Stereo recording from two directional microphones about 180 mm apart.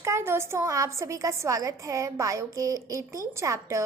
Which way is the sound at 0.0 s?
15° right (ahead or behind).